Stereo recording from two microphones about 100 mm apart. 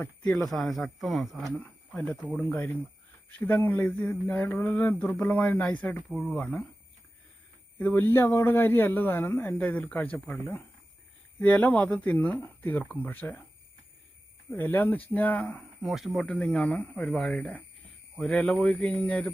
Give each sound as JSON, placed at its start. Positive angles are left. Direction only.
{"t": 0.2, "sound": "speech", "side_deg": 10}
{"t": 2.4, "sound": "speech", "side_deg": 20}
{"t": 7.8, "sound": "speech", "side_deg": 15}
{"t": 14.5, "sound": "speech", "side_deg": 20}
{"t": 15.8, "sound": "speech", "side_deg": 0}